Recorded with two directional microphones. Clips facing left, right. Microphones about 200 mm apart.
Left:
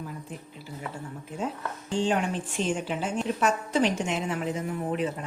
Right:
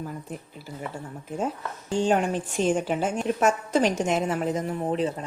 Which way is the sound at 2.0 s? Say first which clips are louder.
Right 3 dB; 45° right (ahead or behind).